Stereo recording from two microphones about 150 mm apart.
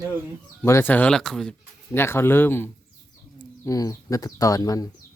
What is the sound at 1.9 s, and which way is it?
Speech, 15° left (ahead or behind).